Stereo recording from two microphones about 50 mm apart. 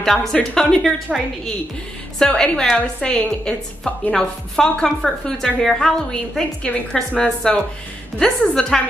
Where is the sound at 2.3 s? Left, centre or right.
Centre.